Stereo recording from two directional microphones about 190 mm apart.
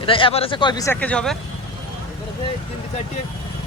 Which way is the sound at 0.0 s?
30° left (ahead or behind).